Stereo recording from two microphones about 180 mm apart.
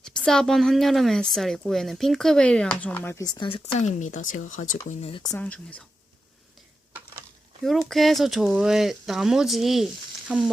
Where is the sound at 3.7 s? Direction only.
40° left (ahead or behind).